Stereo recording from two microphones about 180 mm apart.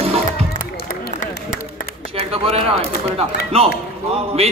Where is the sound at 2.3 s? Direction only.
35° right (ahead or behind).